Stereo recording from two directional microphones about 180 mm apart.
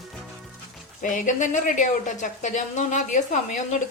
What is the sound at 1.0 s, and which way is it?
A woman's voice, 45° left (ahead or behind).